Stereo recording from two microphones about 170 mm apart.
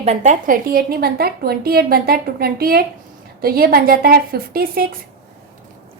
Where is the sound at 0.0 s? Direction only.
40° right (ahead or behind); by 5.0 s 60° right (ahead or behind).